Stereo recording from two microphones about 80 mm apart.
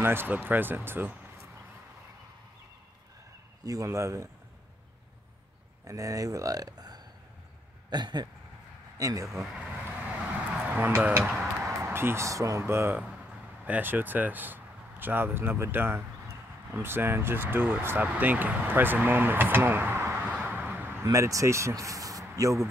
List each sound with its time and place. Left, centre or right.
0.0 s speech: right
3.6 s speech: right
5.9 s speech: right
7.9 s a sound: right
8.9 s speech: right
9.7 s vehicle: centre
10.7 s speech: right
11.6 s music: right
12.3 s speech: right
13.7 s speech: right
20.2 s vehicle: centre
21.0 s speech: right